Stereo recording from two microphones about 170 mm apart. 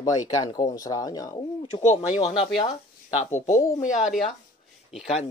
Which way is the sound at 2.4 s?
25° left (ahead or behind).